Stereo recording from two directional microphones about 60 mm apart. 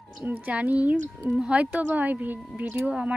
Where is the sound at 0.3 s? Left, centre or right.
Right.